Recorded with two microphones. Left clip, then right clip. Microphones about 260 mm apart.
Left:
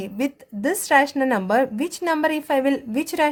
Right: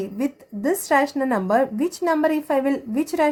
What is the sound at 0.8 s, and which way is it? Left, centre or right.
Speech, left.